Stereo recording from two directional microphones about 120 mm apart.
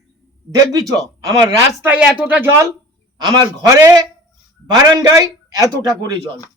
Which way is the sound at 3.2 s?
35° right (ahead or behind).